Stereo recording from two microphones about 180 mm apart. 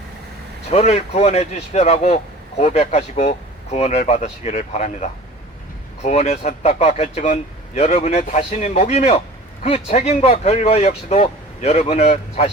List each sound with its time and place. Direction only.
0.7 s speech: 40° left (ahead or behind)